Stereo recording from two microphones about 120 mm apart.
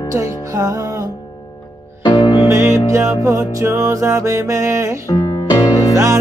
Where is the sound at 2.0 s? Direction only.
35° left (ahead or behind).